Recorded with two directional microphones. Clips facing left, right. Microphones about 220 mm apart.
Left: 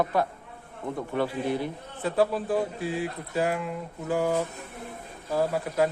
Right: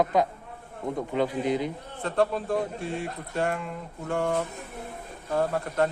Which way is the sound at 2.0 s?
5° left (ahead or behind).